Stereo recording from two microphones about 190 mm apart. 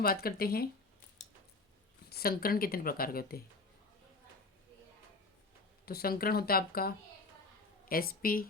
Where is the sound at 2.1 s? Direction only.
55° left (ahead or behind).